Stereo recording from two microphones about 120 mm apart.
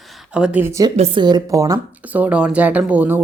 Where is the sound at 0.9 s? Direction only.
60° right (ahead or behind).